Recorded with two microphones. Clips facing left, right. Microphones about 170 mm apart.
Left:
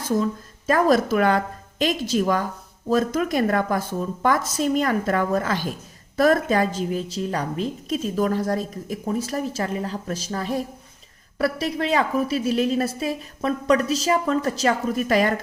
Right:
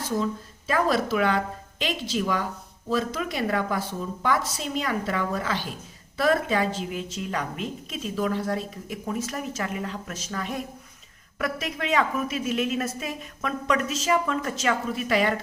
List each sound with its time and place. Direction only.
0.7 s a woman's voice: 45° left (ahead or behind)